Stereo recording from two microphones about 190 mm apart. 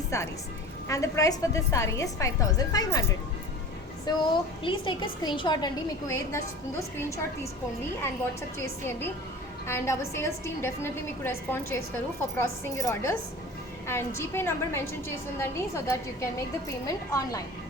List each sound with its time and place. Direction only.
0.1 s a woman's voice: 15° left (ahead or behind)
8.0 s a woman's voice: 15° left (ahead or behind)